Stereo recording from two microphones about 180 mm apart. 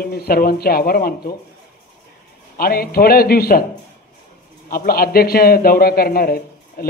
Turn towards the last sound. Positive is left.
turn(degrees=55)  # may be behind; listen again after turning